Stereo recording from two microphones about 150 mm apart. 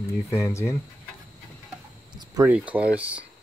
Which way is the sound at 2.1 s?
30° right (ahead or behind).